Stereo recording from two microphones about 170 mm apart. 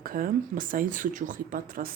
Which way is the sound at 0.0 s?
55° right (ahead or behind).